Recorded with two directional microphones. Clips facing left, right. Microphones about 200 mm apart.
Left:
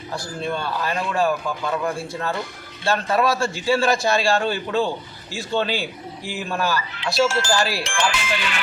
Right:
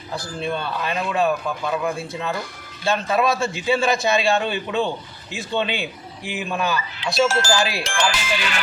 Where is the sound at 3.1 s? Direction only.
20° right (ahead or behind).